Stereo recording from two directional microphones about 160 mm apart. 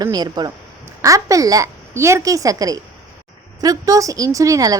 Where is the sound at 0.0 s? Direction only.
25° right (ahead or behind).